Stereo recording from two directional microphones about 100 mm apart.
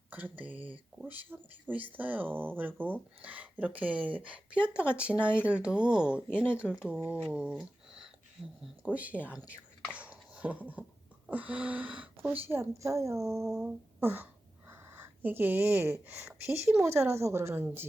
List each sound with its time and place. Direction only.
0.1 s speech: 20° right (ahead or behind)
8.4 s speech: 5° left (ahead or behind)
8.8 s speech: 15° right (ahead or behind)
9.9 s a sound: 15° right (ahead or behind)
11.3 s speech: 15° right (ahead or behind)